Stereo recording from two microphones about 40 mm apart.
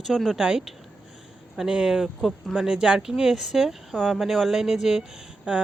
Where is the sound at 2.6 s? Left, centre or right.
Right; by 4.5 s centre.